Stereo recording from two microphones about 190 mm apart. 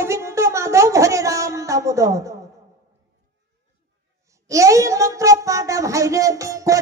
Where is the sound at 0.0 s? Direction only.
15° right (ahead or behind).